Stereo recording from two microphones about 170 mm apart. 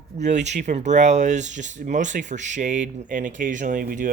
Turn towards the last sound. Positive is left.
turn(degrees=-50)  # may be behind; listen again after turning